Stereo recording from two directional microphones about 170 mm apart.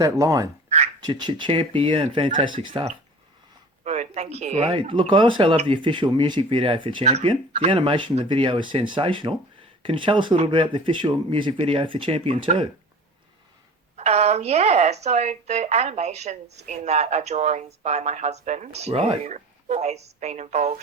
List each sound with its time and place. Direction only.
0.0 s speech: 20° right (ahead or behind)
3.8 s speech: 45° right (ahead or behind)
4.7 s speech: 30° right (ahead or behind)
13.9 s speech: 40° right (ahead or behind)